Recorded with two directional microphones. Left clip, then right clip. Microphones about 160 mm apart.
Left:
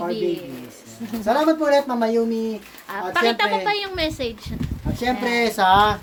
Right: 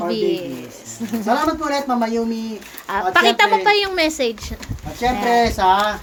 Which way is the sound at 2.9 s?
40° right (ahead or behind).